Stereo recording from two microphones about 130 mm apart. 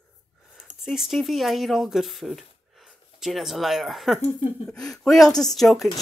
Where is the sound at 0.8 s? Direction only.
Centre (ahead or behind).